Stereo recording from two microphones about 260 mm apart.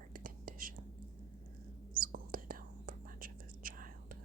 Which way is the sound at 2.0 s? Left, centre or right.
Right.